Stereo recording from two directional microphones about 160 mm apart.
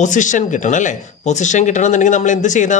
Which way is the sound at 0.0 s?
50° left (ahead or behind).